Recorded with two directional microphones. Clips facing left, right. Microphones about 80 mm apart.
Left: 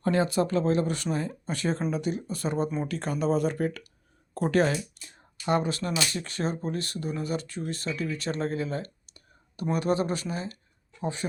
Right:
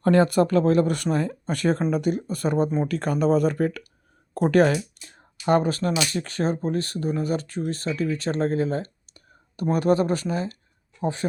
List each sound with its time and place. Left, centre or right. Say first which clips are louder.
0.0 s speech: right 6 dB; right